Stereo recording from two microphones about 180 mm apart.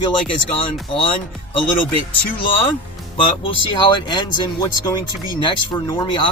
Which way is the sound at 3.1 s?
30° left (ahead or behind).